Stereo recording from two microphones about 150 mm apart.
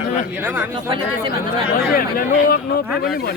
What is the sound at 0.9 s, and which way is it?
Speech, 30° right (ahead or behind).